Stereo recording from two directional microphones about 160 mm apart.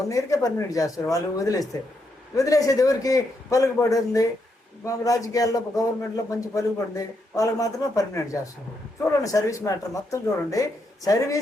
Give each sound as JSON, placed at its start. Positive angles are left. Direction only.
{"t": 0.1, "sound": "speech", "side_deg": 20}